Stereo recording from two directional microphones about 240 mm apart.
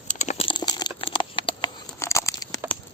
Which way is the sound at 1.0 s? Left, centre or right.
Left.